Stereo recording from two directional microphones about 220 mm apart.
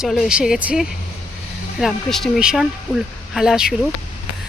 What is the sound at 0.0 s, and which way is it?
Speech, centre (ahead or behind).